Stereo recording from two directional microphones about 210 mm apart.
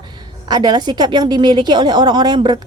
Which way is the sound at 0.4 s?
20° right (ahead or behind).